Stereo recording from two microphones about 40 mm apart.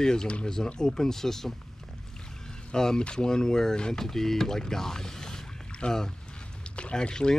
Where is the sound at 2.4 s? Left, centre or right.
Centre.